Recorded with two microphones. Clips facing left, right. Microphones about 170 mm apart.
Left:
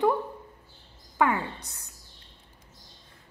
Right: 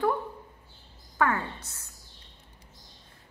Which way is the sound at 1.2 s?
15° left (ahead or behind).